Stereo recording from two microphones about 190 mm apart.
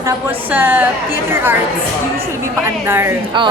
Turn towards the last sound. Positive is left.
turn(degrees=-10)  # may be behind; listen again after turning